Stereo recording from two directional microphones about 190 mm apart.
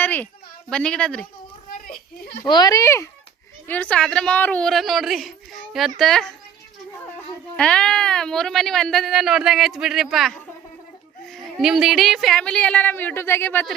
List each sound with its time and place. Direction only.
0.0 s a sound: 10° left (ahead or behind)
0.7 s speech: 5° left (ahead or behind)
2.4 s a child's voice: 20° left (ahead or behind); by 6.3 s centre (ahead or behind)
7.5 s speech: 5° left (ahead or behind)